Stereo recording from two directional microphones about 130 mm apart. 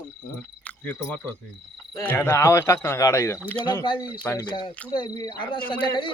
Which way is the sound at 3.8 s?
40° left (ahead or behind).